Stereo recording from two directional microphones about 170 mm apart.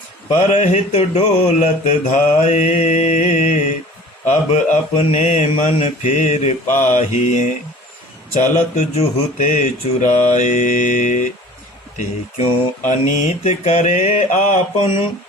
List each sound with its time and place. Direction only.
0.3 s mantra: 45° left (ahead or behind)